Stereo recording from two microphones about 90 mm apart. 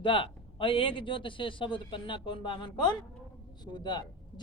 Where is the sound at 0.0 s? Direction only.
70° left (ahead or behind).